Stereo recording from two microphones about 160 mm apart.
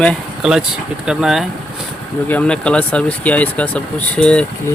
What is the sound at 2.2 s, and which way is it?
Speech, 10° left (ahead or behind).